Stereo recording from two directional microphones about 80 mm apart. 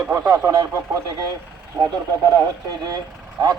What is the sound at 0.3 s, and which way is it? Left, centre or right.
Speech, right.